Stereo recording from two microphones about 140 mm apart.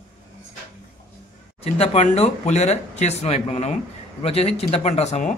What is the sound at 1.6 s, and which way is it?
Speech, 45° left (ahead or behind).